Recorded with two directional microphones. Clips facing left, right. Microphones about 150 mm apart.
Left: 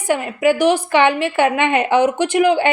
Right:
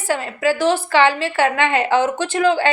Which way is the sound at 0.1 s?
15° left (ahead or behind).